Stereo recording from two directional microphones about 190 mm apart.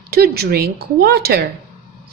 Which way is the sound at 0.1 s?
55° right (ahead or behind).